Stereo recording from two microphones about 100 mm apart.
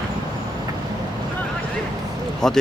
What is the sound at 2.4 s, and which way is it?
Speech, 5° left (ahead or behind).